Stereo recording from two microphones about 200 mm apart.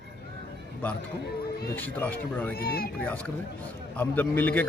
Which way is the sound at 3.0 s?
5° left (ahead or behind).